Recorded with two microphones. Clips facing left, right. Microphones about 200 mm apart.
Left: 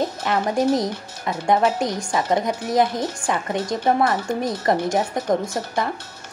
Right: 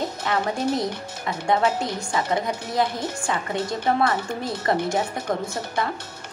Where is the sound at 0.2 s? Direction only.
20° left (ahead or behind).